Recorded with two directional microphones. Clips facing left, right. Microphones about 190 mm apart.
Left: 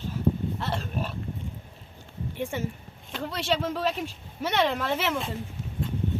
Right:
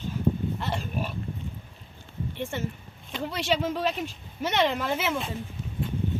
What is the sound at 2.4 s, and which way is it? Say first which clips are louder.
Speech: left 2 dB; 10° left (ahead or behind).